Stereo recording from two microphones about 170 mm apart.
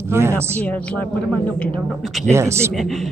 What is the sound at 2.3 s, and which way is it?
Speech, 15° right (ahead or behind).